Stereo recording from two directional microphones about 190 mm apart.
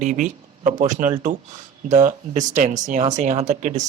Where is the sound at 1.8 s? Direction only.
40° right (ahead or behind).